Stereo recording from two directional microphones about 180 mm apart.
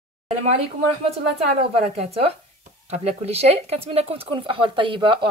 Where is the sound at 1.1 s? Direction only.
35° right (ahead or behind).